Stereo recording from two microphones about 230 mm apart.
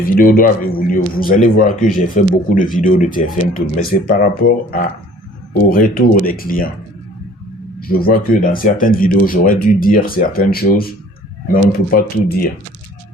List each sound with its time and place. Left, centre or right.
0.0 s speech: left
7.8 s speech: left